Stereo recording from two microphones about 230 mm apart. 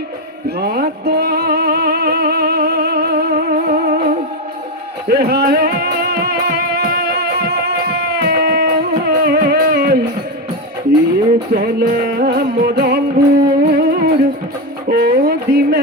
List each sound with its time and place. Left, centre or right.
0.4 s music: right
5.0 s music: right
11.5 s music: right
14.8 s a sound: right